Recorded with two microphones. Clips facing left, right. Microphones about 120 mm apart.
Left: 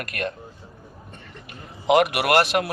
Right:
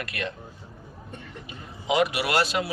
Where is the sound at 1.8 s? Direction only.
60° left (ahead or behind).